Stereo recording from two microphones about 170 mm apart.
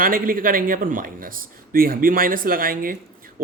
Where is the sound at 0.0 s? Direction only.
55° right (ahead or behind).